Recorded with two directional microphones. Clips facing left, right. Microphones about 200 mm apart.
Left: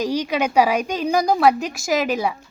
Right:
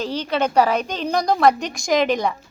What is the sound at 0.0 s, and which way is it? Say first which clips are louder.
A woman's voice: left 1 dB; 10° left (ahead or behind).